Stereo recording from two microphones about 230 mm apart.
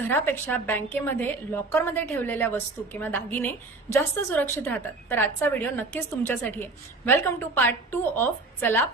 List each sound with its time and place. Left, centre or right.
0.0 s a woman's voice: centre